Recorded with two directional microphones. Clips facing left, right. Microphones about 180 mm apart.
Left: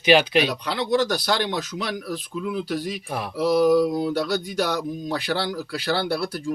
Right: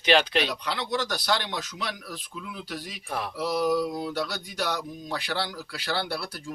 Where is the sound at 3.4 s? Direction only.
35° left (ahead or behind).